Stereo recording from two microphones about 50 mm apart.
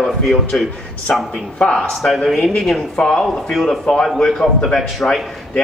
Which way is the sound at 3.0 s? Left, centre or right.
Centre.